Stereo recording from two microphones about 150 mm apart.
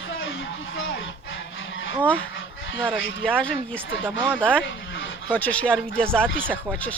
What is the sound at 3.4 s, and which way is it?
Speech, 5° left (ahead or behind).